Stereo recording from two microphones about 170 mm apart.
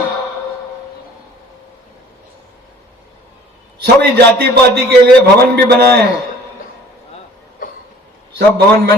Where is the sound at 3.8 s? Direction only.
65° right (ahead or behind).